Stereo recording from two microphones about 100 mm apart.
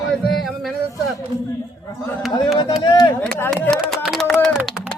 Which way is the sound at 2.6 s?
50° left (ahead or behind).